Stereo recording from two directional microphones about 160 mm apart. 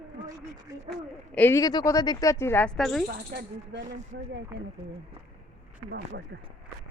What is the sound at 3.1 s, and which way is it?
Speech, 70° right (ahead or behind).